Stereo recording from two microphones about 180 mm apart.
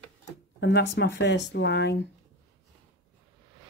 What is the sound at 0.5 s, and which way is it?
Speech, 75° left (ahead or behind).